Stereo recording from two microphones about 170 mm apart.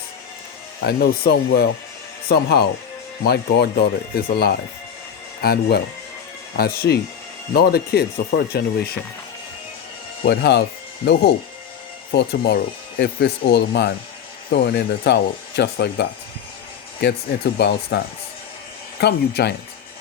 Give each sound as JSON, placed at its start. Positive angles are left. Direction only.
{"t": 0.8, "sound": "speech", "side_deg": 65}
{"t": 10.2, "sound": "speech", "side_deg": 80}
{"t": 11.0, "sound": "speech", "side_deg": 70}
{"t": 17.6, "sound": "speech", "side_deg": 75}